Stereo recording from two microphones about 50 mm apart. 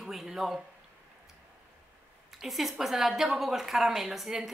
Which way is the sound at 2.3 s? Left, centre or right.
Centre.